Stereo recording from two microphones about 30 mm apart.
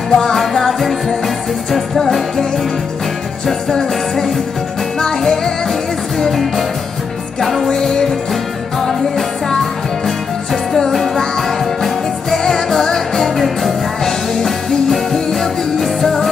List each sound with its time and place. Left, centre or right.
0.1 s music: centre
0.4 s music: centre
3.4 s music: centre
7.8 s music: centre
10.0 s music: centre